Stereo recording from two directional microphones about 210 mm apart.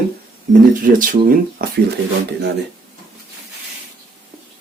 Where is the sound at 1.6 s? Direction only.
40° right (ahead or behind).